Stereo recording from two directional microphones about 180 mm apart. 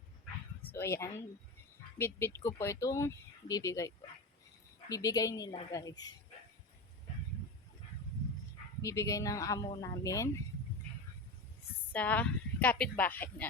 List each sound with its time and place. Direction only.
0.8 s speech: 15° left (ahead or behind)
8.8 s speech: 15° left (ahead or behind)
11.9 s speech: 10° left (ahead or behind)